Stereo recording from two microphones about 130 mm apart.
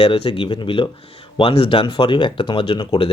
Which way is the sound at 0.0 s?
40° left (ahead or behind).